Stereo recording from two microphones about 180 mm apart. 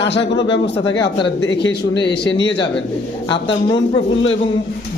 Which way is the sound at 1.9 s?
70° left (ahead or behind).